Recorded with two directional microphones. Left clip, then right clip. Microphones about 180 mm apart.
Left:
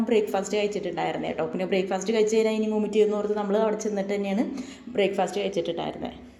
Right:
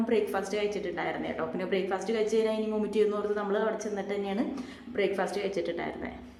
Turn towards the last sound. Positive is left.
turn(degrees=20)  # may be behind; listen again after turning